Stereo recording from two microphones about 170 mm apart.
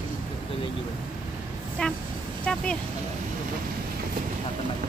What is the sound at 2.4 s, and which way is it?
Speech, 5° left (ahead or behind).